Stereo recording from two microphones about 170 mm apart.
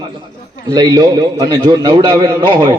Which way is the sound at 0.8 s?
25° right (ahead or behind).